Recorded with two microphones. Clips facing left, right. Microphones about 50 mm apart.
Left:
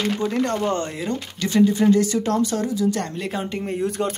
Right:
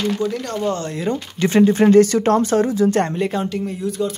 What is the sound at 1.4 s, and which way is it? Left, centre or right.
Speech, right.